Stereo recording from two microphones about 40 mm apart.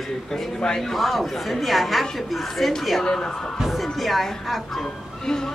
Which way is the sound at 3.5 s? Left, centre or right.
Centre.